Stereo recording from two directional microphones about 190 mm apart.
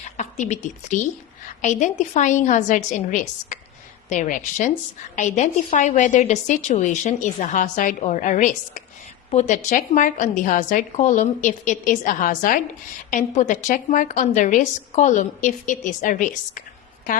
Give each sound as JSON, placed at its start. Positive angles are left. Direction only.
{"t": 0.2, "sound": "a woman's voice", "side_deg": 40}